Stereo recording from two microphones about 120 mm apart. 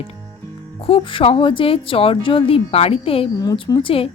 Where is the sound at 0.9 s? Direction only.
50° left (ahead or behind).